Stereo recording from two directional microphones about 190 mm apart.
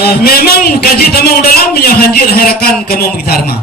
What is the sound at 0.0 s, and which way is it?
A man's voice, 55° left (ahead or behind).